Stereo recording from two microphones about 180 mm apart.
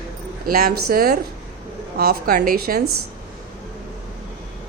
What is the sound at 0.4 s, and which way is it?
A woman's voice, 55° right (ahead or behind).